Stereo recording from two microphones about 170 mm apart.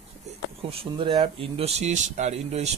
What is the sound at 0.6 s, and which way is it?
Speech, 35° right (ahead or behind).